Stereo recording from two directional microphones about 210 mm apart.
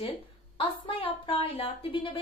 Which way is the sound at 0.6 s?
25° left (ahead or behind).